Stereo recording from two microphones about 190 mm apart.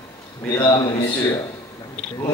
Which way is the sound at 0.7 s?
25° left (ahead or behind).